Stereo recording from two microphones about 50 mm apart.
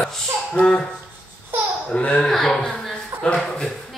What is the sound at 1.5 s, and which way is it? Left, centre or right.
Baby laughter, right.